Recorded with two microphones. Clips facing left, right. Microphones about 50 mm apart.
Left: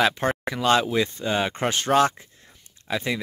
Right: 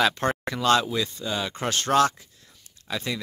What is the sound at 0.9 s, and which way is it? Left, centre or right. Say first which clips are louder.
Speech: left 4 dB; left.